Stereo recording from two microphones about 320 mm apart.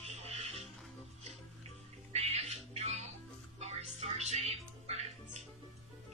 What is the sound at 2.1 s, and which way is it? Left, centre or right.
Music, centre.